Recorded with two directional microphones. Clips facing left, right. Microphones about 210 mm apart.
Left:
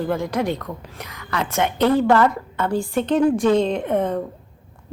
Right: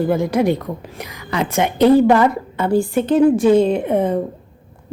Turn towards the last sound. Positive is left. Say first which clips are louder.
# right 4 dB
turn(degrees=-10)  # may be behind; listen again after turning